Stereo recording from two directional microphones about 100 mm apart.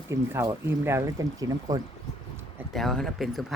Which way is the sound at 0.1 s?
25° right (ahead or behind).